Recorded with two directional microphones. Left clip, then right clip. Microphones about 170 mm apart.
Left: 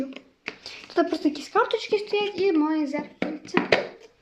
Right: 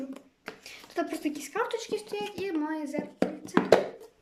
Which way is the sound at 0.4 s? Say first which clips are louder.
Left 7 dB; 10° left (ahead or behind).